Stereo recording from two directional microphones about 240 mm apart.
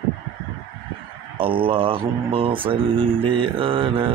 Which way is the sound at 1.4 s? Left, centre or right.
Right.